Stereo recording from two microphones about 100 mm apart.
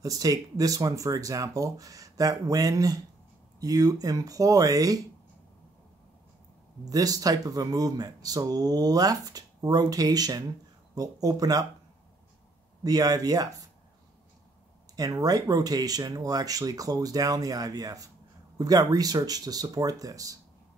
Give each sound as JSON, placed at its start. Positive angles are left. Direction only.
{"t": 0.0, "sound": "speech", "side_deg": -35}
{"t": 6.8, "sound": "speech", "side_deg": -40}
{"t": 12.8, "sound": "speech", "side_deg": -40}
{"t": 15.0, "sound": "speech", "side_deg": -40}